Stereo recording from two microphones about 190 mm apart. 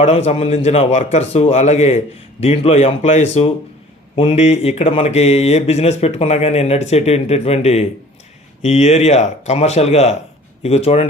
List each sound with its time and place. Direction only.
0.0 s speech: 35° left (ahead or behind)